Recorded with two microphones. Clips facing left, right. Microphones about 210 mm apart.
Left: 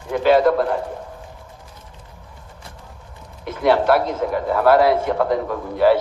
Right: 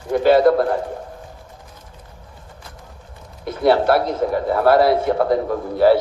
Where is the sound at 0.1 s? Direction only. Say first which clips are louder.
Right 2 dB; 40° right (ahead or behind).